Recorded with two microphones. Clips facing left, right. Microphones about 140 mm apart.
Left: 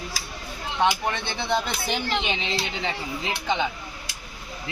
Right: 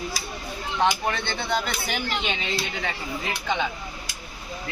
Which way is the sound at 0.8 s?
20° left (ahead or behind).